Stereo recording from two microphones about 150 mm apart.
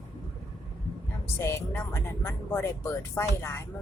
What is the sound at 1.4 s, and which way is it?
Speech, 15° left (ahead or behind).